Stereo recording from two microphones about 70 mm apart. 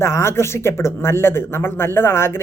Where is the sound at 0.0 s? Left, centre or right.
Left.